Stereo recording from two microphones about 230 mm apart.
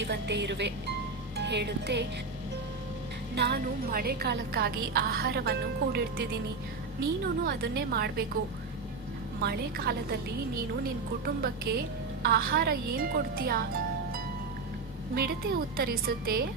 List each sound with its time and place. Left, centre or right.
0.0 s a woman's voice: right
3.3 s a woman's voice: right
9.4 s a woman's voice: right
15.1 s a woman's voice: right